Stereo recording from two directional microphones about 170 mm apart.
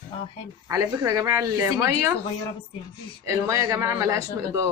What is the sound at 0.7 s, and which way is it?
Speech, 20° right (ahead or behind).